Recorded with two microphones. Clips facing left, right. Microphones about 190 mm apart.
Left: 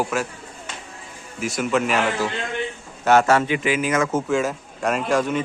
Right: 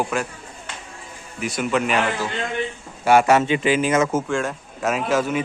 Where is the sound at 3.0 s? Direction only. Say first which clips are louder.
Right 1 dB; 15° right (ahead or behind).